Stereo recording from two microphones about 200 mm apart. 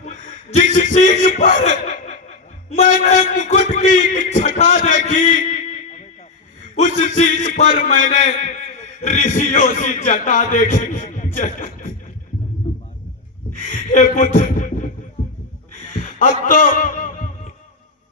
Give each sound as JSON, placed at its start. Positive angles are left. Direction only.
{"t": 0.0, "sound": "a sound", "side_deg": 35}
{"t": 0.8, "sound": "a man's voice", "side_deg": 40}
{"t": 1.9, "sound": "snicker", "side_deg": 35}
{"t": 2.6, "sound": "a man's voice", "side_deg": 35}
{"t": 6.7, "sound": "a man's voice", "side_deg": 40}
{"t": 13.6, "sound": "speech", "side_deg": 40}
{"t": 16.1, "sound": "a sound", "side_deg": 45}